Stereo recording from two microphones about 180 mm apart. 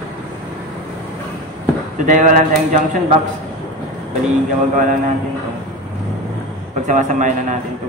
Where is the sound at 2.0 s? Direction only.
45° right (ahead or behind).